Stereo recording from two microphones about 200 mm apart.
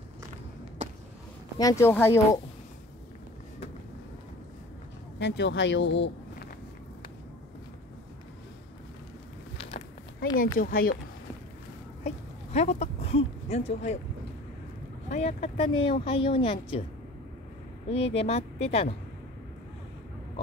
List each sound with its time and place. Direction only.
1.6 s speech: 15° left (ahead or behind)
5.2 s speech: 60° left (ahead or behind)
9.6 s a sound: 30° left (ahead or behind)
10.3 s speech: 45° left (ahead or behind)
12.5 s speech: 35° left (ahead or behind)
15.0 s speech: 35° left (ahead or behind)
17.8 s speech: 30° left (ahead or behind)